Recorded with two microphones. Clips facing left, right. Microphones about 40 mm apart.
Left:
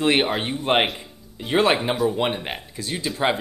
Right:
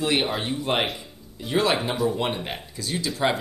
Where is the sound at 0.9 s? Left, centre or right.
Left.